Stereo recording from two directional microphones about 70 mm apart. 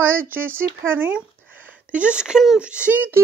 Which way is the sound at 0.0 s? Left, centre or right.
Right.